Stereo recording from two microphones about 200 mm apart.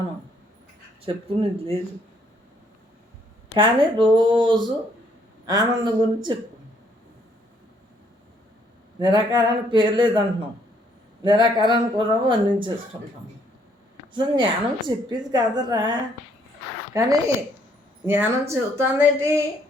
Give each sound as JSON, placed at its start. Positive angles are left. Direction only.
{"t": 1.0, "sound": "a woman's voice", "side_deg": -30}
{"t": 3.5, "sound": "a woman's voice", "side_deg": -25}
{"t": 9.0, "sound": "a woman's voice", "side_deg": -20}